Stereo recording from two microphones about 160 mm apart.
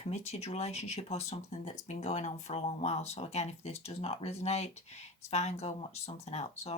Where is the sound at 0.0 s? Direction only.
45° left (ahead or behind).